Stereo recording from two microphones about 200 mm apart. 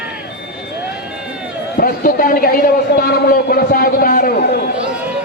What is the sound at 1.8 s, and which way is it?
A man's voice, 45° left (ahead or behind).